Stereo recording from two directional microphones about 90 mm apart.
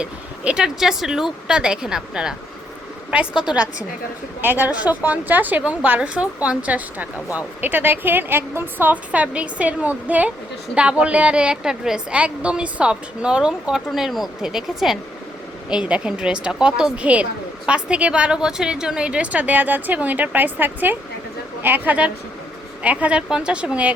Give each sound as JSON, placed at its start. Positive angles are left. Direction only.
{"t": 0.0, "sound": "a woman's voice", "side_deg": -10}